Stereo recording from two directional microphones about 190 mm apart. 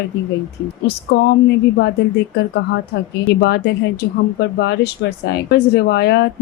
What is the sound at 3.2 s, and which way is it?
Speech, 60° left (ahead or behind).